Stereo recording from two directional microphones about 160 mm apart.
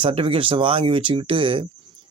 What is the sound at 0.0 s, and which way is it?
Speech, 35° right (ahead or behind).